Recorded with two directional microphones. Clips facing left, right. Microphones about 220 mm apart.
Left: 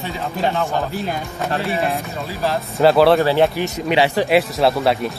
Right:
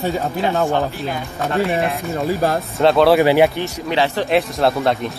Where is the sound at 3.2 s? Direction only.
15° right (ahead or behind).